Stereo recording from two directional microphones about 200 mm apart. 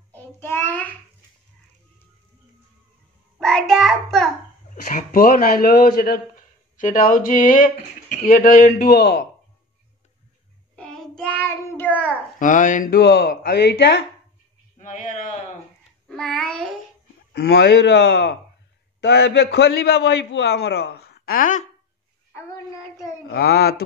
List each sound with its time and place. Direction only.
0.1 s child singing: 10° left (ahead or behind)
3.3 s child singing: centre (ahead or behind)
4.8 s speech: 45° left (ahead or behind)
10.8 s child singing: 5° left (ahead or behind)
12.4 s speech: 40° left (ahead or behind); by 14.0 s 60° left (ahead or behind)
14.8 s a sound: 40° left (ahead or behind)
16.1 s child singing: 5° left (ahead or behind)
17.3 s a man's voice: 55° left (ahead or behind)
22.3 s child singing: 15° left (ahead or behind)
23.2 s speech: 50° left (ahead or behind)